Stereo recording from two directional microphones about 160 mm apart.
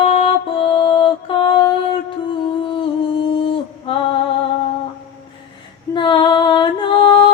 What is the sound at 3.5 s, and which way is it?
Mantra, 35° left (ahead or behind).